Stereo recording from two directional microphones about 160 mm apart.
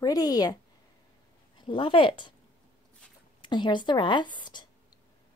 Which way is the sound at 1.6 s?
30° left (ahead or behind).